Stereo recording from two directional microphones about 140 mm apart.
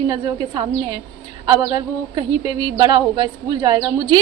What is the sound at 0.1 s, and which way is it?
A woman's voice, 30° right (ahead or behind).